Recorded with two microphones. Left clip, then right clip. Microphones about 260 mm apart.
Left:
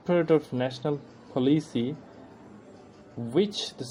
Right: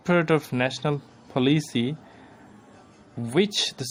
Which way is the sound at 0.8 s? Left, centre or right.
Right.